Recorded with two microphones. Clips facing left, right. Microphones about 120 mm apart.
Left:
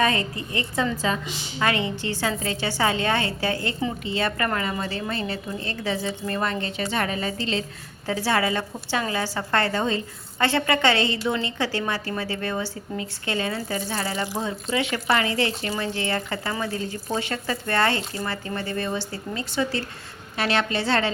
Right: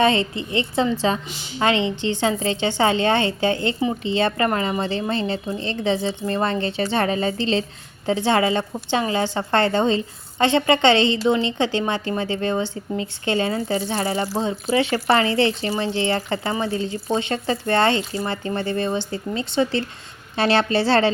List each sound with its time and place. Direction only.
0.0 s a woman's voice: 25° right (ahead or behind)